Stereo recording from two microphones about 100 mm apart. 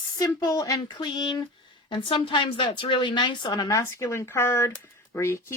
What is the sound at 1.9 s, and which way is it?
A woman's voice, 55° left (ahead or behind).